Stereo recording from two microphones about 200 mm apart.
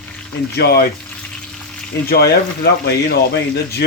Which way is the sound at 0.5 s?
55° left (ahead or behind).